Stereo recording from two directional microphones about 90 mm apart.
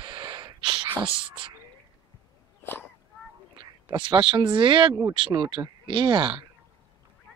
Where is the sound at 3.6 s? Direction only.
65° right (ahead or behind).